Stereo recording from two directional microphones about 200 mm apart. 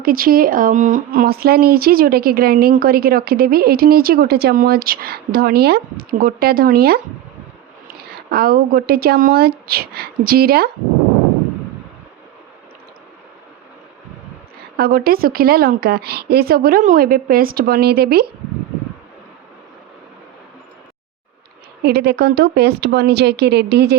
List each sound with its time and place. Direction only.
0.0 s speech: 45° right (ahead or behind)
14.8 s speech: 50° right (ahead or behind)
21.8 s speech: 50° right (ahead or behind)